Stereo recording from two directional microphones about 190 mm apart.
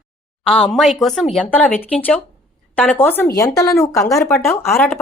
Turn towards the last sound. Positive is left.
turn(degrees=5)  # may be behind; listen again after turning